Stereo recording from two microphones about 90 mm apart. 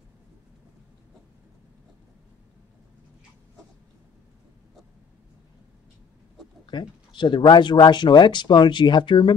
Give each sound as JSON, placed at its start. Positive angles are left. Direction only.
{"t": 6.6, "sound": "speech", "side_deg": 60}